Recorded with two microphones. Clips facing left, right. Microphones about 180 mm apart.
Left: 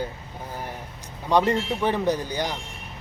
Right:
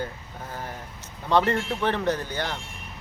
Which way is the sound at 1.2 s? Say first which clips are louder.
Left 1 dB; 15° left (ahead or behind).